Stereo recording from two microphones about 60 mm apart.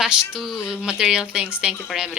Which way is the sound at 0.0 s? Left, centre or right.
Centre.